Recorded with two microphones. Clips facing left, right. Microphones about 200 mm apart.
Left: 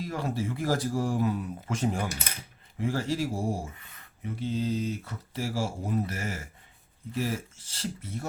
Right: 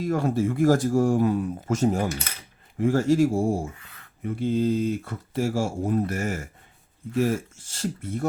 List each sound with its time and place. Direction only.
0.0 s speech: 50° right (ahead or behind)